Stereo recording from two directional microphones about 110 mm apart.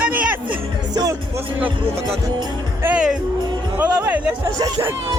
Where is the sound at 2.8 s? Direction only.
10° right (ahead or behind).